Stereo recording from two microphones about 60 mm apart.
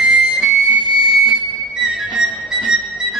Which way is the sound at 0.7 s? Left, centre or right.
Right.